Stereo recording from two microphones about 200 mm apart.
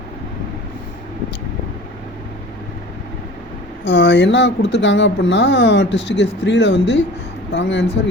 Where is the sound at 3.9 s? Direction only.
65° left (ahead or behind).